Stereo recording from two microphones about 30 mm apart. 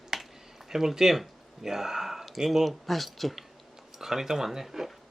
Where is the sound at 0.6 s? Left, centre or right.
Centre.